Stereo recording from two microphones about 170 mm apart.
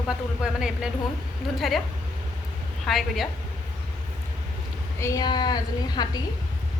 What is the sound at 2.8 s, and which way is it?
Speech, centre (ahead or behind).